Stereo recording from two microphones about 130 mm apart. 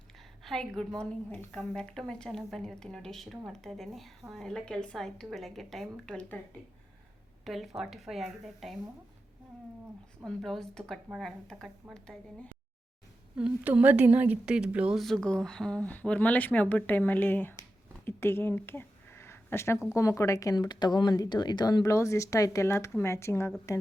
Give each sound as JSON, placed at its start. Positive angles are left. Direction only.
{"t": 0.4, "sound": "a woman's voice", "side_deg": 5}
{"t": 7.4, "sound": "a woman's voice", "side_deg": 0}
{"t": 10.2, "sound": "a woman's voice", "side_deg": 0}
{"t": 13.3, "sound": "a woman's voice", "side_deg": -10}
{"t": 17.6, "sound": "a sound", "side_deg": 20}
{"t": 19.9, "sound": "speech", "side_deg": 25}